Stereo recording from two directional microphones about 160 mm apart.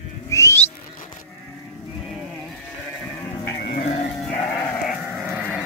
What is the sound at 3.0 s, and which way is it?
Sheep, 15° left (ahead or behind).